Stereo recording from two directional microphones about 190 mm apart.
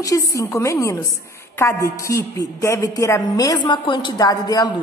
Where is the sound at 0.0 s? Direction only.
15° left (ahead or behind).